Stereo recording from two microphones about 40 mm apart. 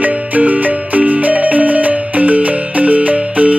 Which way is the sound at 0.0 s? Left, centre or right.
Right.